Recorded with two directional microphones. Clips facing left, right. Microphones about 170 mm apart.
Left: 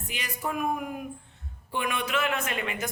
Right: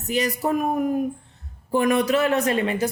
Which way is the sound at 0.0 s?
40° right (ahead or behind).